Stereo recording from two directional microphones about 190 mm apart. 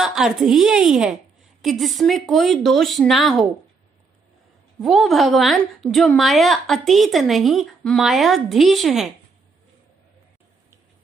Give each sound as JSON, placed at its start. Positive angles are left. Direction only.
{"t": 0.0, "sound": "a woman's voice", "side_deg": -5}
{"t": 4.8, "sound": "a woman's voice", "side_deg": 0}